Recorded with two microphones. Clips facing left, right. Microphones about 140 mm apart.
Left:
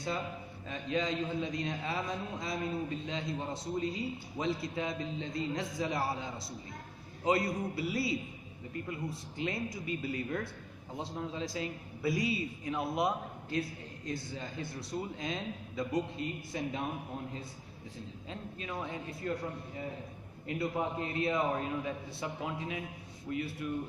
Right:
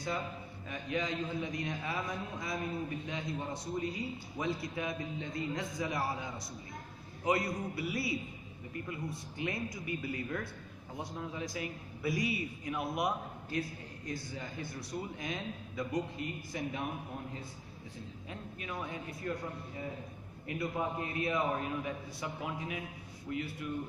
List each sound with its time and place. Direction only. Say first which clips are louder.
0.7 s a man's voice: left 2 dB; 25° left (ahead or behind)
20.4 s a man's voice: left 2 dB; 25° left (ahead or behind)